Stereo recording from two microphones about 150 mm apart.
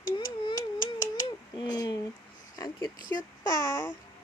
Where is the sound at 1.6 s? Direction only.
25° left (ahead or behind).